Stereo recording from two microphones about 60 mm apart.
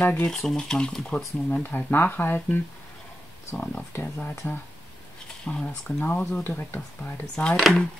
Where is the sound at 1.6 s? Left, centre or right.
Left.